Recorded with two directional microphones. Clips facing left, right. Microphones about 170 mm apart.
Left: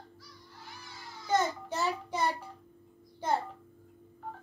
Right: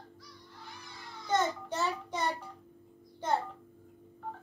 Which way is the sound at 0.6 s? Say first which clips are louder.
Left 1 dB; centre (ahead or behind).